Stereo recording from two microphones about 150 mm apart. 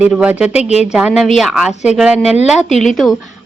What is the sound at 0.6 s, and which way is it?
Speech, 45° left (ahead or behind).